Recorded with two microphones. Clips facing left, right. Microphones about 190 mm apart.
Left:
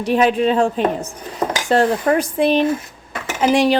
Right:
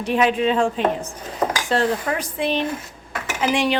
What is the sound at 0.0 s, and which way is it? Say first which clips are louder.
Speech: left 3 dB; 35° left (ahead or behind).